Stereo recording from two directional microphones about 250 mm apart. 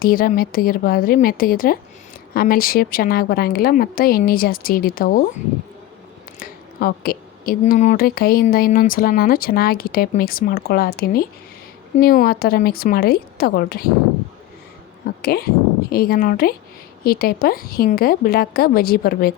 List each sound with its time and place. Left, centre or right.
0.0 s a woman's voice: left
6.4 s a woman's voice: left
15.0 s a woman's voice: left